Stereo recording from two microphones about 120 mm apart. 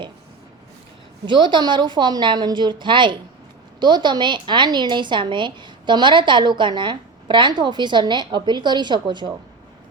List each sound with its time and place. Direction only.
1.2 s a woman's voice: 40° right (ahead or behind)